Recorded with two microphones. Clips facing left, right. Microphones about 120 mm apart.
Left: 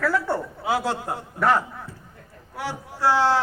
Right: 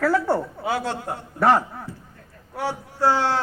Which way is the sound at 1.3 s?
30° right (ahead or behind).